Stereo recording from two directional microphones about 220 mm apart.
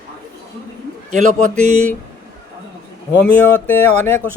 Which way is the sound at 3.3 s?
10° left (ahead or behind).